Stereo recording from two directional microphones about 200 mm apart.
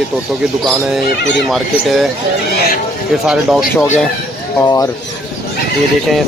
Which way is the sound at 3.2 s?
Centre (ahead or behind).